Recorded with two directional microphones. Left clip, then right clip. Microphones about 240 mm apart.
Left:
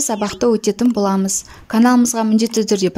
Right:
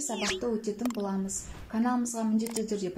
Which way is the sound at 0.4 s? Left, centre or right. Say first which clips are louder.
Left 16 dB; left.